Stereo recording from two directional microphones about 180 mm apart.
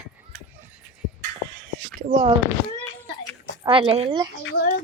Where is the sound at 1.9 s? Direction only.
50° right (ahead or behind).